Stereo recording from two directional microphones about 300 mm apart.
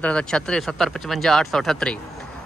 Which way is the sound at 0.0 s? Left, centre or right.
Centre.